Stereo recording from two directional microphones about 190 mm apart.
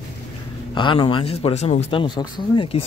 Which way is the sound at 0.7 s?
25° left (ahead or behind).